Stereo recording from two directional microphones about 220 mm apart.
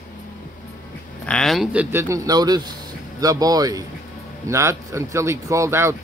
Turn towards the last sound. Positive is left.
turn(degrees=-10)  # may be behind; listen again after turning